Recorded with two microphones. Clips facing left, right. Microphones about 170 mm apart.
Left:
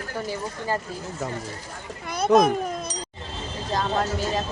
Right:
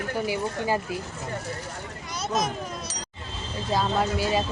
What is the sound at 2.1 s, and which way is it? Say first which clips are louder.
Children playing: left 10 dB; 55° left (ahead or behind).